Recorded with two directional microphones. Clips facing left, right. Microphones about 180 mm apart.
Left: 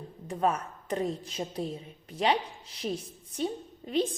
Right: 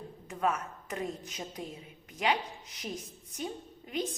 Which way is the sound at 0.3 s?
35° left (ahead or behind).